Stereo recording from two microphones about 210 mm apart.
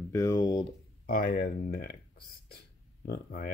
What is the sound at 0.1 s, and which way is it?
Speech, 15° left (ahead or behind).